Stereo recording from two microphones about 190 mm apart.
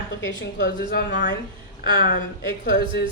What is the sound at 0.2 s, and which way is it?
Speech, 70° left (ahead or behind).